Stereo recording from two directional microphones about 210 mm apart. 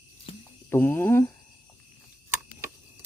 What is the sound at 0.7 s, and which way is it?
Mechanisms, 10° left (ahead or behind).